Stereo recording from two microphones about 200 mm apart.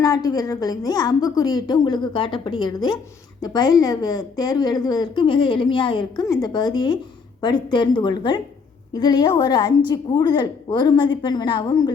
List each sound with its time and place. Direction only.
0.0 s a woman's voice: 20° left (ahead or behind)